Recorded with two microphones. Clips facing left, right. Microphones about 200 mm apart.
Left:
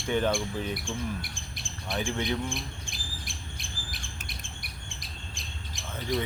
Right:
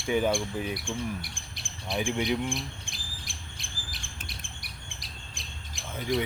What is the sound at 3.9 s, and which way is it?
Squawk, 55° left (ahead or behind).